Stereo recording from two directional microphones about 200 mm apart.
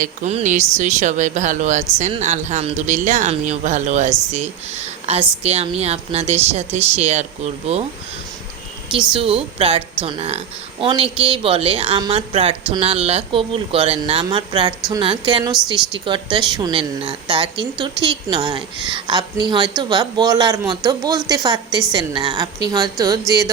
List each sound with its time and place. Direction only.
0.0 s speech: 35° right (ahead or behind)
9.1 s speech: 25° right (ahead or behind)